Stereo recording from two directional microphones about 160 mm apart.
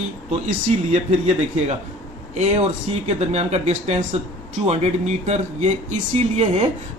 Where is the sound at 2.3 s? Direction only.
45° right (ahead or behind).